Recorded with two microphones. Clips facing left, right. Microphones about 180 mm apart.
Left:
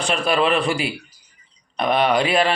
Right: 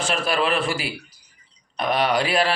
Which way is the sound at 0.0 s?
5° right (ahead or behind).